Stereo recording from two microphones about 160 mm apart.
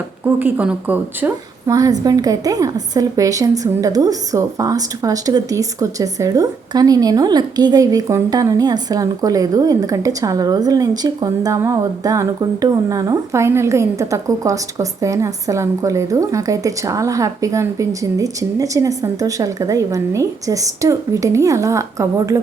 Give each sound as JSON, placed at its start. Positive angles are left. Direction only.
{"t": 0.3, "sound": "a woman's voice", "side_deg": -10}
{"t": 1.7, "sound": "a woman's voice", "side_deg": -25}